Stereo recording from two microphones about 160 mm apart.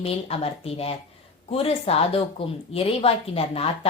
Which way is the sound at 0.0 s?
40° left (ahead or behind).